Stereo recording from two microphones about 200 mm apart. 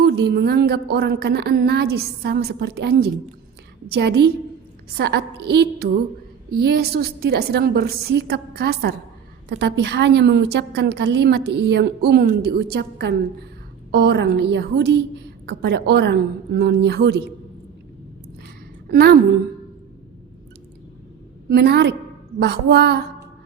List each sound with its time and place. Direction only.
0.2 s a woman's voice: 55° right (ahead or behind)
18.9 s a woman's voice: 50° right (ahead or behind)
21.5 s a woman's voice: 55° right (ahead or behind)